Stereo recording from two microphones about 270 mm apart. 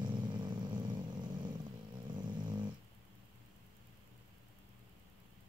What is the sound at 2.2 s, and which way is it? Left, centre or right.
Dog, centre.